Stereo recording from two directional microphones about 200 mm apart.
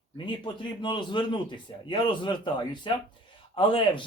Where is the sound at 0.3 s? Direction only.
25° left (ahead or behind).